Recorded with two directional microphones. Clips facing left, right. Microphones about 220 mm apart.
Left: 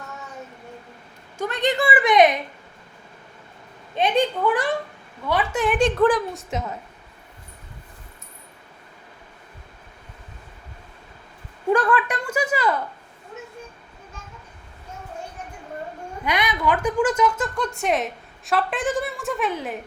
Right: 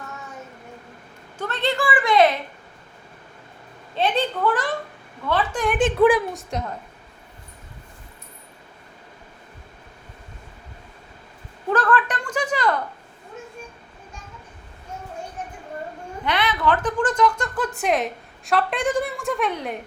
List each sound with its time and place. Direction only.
1.4 s a woman's voice: 15° left (ahead or behind)
3.9 s speech: 15° left (ahead or behind)
5.8 s a woman's voice: 10° right (ahead or behind)
11.7 s a sound: 10° left (ahead or behind)
16.2 s a woman's voice: 10° left (ahead or behind)